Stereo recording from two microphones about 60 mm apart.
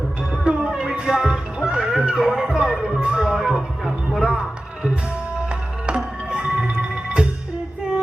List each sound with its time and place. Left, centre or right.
0.4 s music: centre
6.3 s music: centre